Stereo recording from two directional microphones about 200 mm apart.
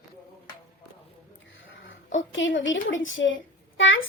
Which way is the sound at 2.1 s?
70° left (ahead or behind).